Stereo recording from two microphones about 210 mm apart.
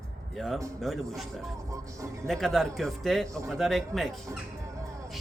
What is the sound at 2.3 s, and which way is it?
Speech, centre (ahead or behind).